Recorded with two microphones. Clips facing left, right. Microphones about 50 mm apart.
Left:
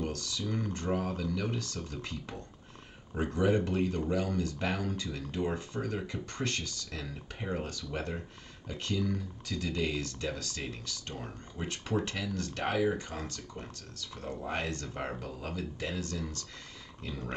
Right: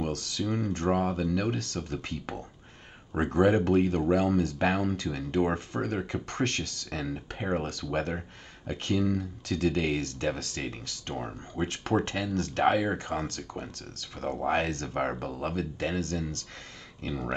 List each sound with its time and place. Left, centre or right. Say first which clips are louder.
0.0 s speech: right 4 dB; right